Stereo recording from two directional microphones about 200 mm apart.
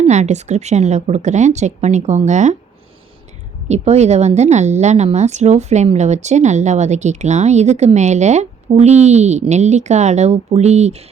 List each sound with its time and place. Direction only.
0.0 s a woman's voice: 35° right (ahead or behind)
3.7 s a woman's voice: 35° right (ahead or behind)